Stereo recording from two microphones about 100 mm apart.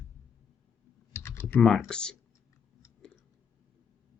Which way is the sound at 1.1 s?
25° left (ahead or behind).